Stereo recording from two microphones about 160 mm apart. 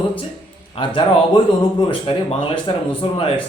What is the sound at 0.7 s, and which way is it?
Speech, 30° left (ahead or behind).